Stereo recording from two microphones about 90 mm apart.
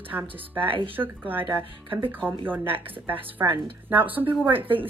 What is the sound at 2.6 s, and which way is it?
Speech, 80° right.